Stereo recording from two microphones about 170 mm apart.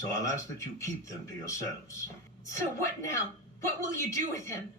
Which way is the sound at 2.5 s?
15° left (ahead or behind).